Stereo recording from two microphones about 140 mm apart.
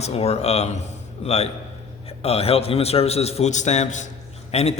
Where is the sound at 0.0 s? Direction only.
45° left (ahead or behind).